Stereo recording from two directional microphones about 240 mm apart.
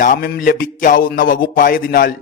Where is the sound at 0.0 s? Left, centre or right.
Left.